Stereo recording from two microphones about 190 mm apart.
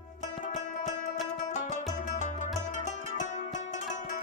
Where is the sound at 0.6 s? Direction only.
40° left (ahead or behind).